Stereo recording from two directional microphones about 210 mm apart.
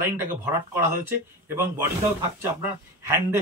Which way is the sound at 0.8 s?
10° right (ahead or behind).